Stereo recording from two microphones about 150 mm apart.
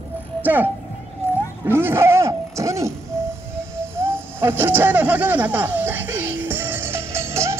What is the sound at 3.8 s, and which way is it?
Owl, 15° right (ahead or behind).